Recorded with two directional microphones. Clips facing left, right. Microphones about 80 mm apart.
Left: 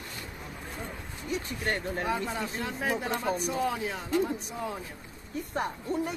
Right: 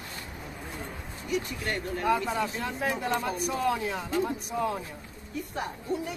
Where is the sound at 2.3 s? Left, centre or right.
Right.